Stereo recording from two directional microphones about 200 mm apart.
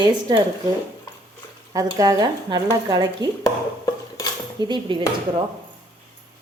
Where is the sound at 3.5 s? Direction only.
20° left (ahead or behind).